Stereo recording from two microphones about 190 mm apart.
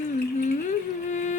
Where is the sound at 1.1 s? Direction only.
40° left (ahead or behind).